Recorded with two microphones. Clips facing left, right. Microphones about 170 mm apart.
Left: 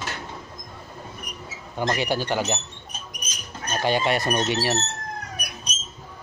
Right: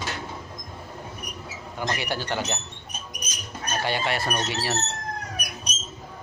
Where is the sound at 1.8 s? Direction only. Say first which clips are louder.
Left 5 dB; 15° left (ahead or behind).